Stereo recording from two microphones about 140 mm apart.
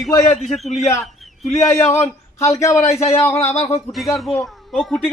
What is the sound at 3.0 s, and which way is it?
Speech, 45° left (ahead or behind).